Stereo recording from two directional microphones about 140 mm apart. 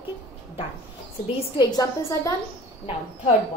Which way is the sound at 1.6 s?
25° left (ahead or behind).